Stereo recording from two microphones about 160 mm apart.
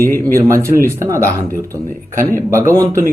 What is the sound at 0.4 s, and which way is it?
Speech, 20° right (ahead or behind).